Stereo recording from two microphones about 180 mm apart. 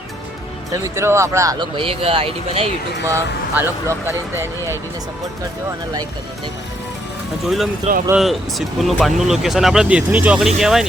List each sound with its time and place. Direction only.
0.7 s speech: 15° right (ahead or behind); by 2.6 s 30° right (ahead or behind)
3.1 s speech: 15° right (ahead or behind)
7.4 s speech: centre (ahead or behind)